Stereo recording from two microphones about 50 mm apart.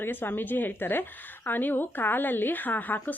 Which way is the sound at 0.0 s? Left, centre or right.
Left.